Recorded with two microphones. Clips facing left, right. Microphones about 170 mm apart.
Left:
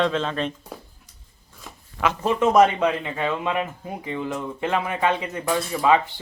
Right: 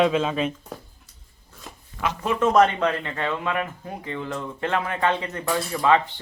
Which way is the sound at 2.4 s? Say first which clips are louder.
Left 1 dB; 15° left (ahead or behind).